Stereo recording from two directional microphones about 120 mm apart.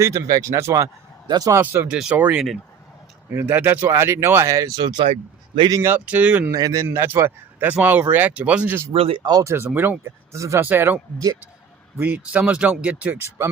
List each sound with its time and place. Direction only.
0.0 s speech: 25° right (ahead or behind)
1.5 s speech: 15° right (ahead or behind)
3.3 s speech: 20° right (ahead or behind)
4.8 s speech: 40° right (ahead or behind)
5.8 s speech: 15° right (ahead or behind)
6.5 s speech: 30° right (ahead or behind)
6.8 s speech: 20° right (ahead or behind)
8.9 s speech: 50° right (ahead or behind)
9.2 s speech: 30° right (ahead or behind)